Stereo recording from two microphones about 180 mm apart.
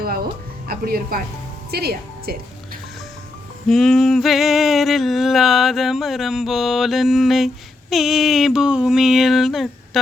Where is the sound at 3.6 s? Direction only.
Centre (ahead or behind).